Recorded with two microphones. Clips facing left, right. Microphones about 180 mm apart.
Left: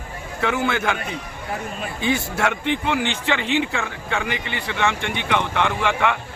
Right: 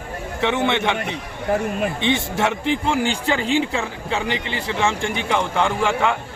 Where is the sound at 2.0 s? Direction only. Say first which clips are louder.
Left 1 dB; 25° right (ahead or behind).